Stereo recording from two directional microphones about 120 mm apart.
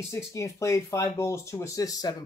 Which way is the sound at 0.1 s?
25° left (ahead or behind).